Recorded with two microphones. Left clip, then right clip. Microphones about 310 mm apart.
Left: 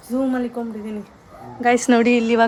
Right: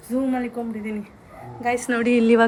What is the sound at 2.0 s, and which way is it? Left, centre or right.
Speech, centre.